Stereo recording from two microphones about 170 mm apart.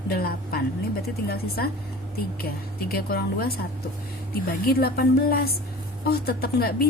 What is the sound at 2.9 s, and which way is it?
Speech, 65° left (ahead or behind).